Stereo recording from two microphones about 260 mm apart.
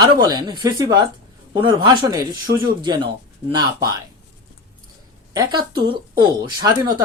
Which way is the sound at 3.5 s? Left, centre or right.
Centre.